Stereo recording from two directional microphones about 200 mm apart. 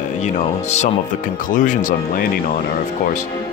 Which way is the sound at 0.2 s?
35° left (ahead or behind).